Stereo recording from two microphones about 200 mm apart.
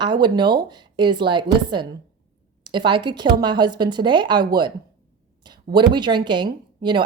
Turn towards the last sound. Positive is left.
turn(degrees=-25)  # may be behind; listen again after turning